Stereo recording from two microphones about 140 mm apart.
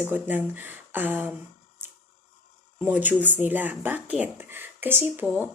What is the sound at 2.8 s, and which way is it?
Speech, 10° right (ahead or behind).